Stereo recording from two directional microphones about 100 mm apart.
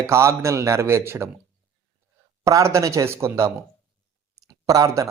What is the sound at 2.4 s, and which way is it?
Speech, 30° right (ahead or behind).